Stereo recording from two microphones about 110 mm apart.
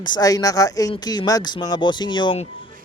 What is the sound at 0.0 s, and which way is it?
Speech, 40° left (ahead or behind).